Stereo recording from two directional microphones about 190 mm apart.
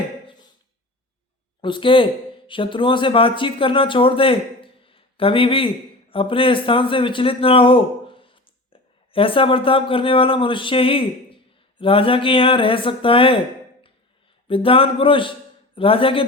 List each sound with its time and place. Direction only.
1.6 s speech: 25° left (ahead or behind)
14.4 s speech: 30° left (ahead or behind)